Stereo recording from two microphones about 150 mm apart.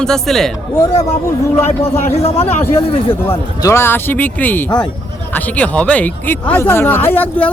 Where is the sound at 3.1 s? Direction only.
15° left (ahead or behind).